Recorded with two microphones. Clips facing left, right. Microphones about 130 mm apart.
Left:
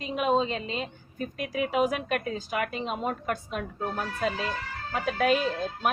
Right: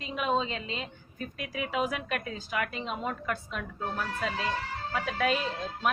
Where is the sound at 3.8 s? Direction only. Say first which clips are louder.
Left 2 dB; 30° left (ahead or behind).